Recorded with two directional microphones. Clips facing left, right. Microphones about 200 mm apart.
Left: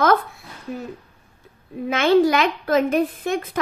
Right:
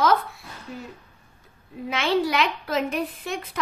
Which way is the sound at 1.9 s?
50° left (ahead or behind).